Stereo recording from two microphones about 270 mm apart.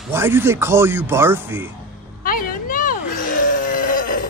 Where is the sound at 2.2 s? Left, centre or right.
Left.